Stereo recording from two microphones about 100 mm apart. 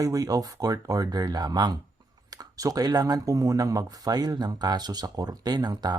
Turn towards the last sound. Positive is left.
turn(degrees=-40)  # may be behind; listen again after turning